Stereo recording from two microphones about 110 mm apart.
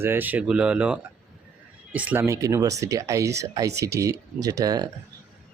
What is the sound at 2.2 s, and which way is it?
Speech, 30° right (ahead or behind).